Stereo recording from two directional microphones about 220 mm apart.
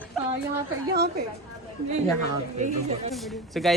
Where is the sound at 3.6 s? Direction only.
Centre (ahead or behind).